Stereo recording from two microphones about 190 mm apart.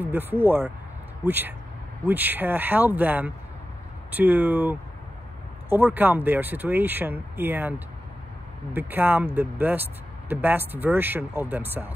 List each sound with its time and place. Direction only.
0.0 s speech: 10° right (ahead or behind)
8.7 s speech: 10° right (ahead or behind)